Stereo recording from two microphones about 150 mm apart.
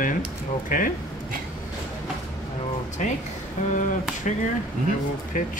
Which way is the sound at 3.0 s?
55° left (ahead or behind).